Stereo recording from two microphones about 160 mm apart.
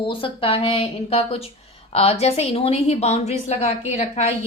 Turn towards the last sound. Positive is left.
turn(degrees=40)  # may be behind; listen again after turning